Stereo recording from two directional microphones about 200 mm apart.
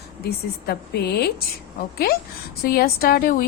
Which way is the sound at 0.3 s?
55° left (ahead or behind).